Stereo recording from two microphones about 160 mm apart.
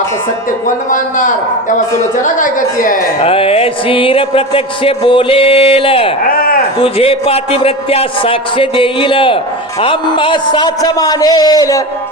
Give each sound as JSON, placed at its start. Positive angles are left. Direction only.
{"t": 2.2, "sound": "a woman's voice", "side_deg": 55}
{"t": 3.2, "sound": "music", "side_deg": 35}
{"t": 6.2, "sound": "a sound", "side_deg": 65}
{"t": 6.7, "sound": "music", "side_deg": 35}
{"t": 9.8, "sound": "a man's voice", "side_deg": 30}